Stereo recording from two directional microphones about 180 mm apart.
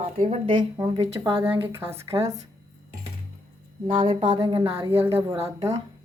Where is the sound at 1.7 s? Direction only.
15° right (ahead or behind).